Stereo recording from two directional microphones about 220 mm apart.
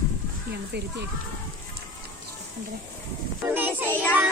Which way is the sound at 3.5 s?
10° right (ahead or behind).